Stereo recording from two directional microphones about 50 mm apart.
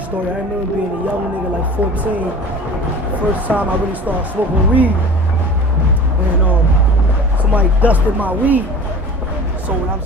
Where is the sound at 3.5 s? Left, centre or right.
Right.